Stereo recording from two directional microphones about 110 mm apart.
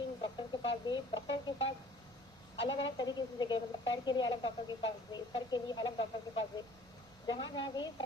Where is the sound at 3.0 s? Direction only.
40° left (ahead or behind).